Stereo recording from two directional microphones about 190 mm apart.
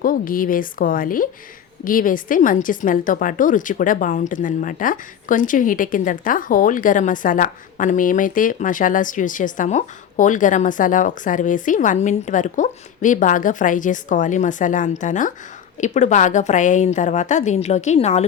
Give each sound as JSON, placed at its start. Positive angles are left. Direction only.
{"t": 0.0, "sound": "a woman's voice", "side_deg": 45}